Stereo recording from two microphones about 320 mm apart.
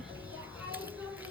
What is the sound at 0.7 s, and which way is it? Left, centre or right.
Music, centre.